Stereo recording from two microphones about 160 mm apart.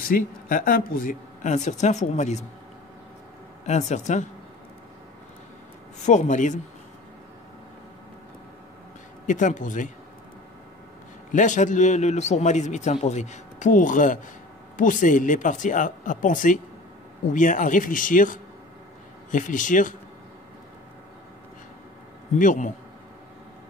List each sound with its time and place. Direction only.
0.0 s a man's voice: 60° left (ahead or behind); by 2.4 s 45° left (ahead or behind)
3.6 s a man's voice: 45° left (ahead or behind)
6.0 s a man's voice: 50° left (ahead or behind)
9.2 s a man's voice: 50° left (ahead or behind)
11.3 s a man's voice: 50° left (ahead or behind)
22.4 s a man's voice: 55° left (ahead or behind)